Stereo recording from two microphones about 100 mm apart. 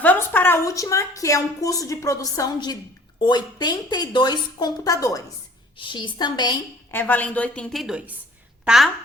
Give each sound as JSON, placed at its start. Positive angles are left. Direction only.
{"t": 0.0, "sound": "a sound", "side_deg": 20}
{"t": 0.6, "sound": "a woman's voice", "side_deg": 30}
{"t": 5.7, "sound": "a woman's voice", "side_deg": 55}
{"t": 6.9, "sound": "a woman's voice", "side_deg": 20}
{"t": 7.7, "sound": "a woman's voice", "side_deg": 0}